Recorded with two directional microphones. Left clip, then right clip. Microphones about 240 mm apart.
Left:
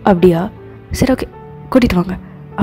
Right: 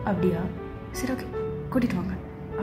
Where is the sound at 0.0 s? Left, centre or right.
Left.